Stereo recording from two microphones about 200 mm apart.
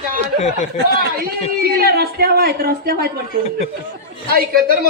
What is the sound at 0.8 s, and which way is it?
Speech, 50° right (ahead or behind).